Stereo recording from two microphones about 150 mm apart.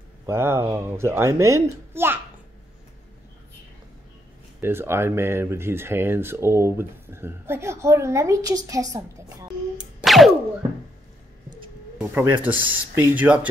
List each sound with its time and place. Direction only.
0.3 s speech: 15° right (ahead or behind)
4.6 s speech: 15° right (ahead or behind)
10.0 s boing: centre (ahead or behind)
12.1 s speech: 15° right (ahead or behind)